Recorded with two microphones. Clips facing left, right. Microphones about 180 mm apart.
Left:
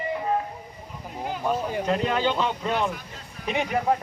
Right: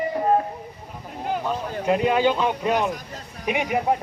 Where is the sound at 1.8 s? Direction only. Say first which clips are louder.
Right 6 dB; 10° right (ahead or behind).